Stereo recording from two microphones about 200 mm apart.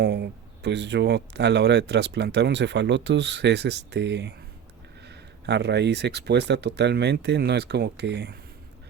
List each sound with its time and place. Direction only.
0.0 s speech: 55° right (ahead or behind)